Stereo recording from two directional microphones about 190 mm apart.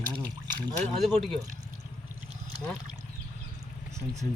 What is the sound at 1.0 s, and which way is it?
Speech, centre (ahead or behind).